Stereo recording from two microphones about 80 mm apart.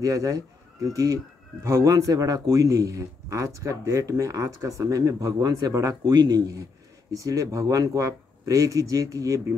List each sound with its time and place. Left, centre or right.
0.0 s speech: right
7.1 s speech: right